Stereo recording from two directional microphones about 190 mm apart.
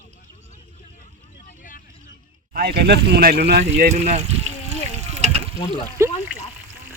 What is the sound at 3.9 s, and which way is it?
Speech, 35° right (ahead or behind).